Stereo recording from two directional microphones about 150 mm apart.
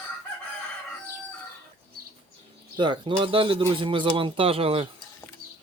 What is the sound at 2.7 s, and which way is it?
Speech, 30° right (ahead or behind).